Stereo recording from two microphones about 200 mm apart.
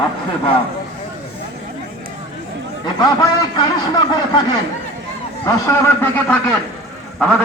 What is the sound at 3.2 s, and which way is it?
A man's voice, 20° left (ahead or behind).